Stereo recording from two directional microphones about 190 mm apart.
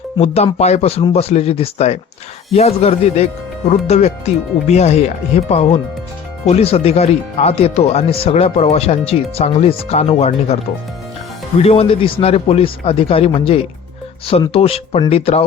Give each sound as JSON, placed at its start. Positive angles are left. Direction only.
{"t": 0.2, "sound": "a man's voice", "side_deg": 35}